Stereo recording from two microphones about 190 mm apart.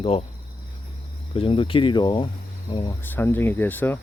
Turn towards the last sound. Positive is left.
turn(degrees=10)  # may be behind; listen again after turning